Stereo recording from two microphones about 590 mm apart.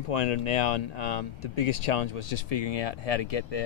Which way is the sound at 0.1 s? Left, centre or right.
Left.